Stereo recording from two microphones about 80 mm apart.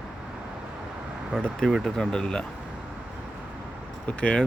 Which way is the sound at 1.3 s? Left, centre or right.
Centre.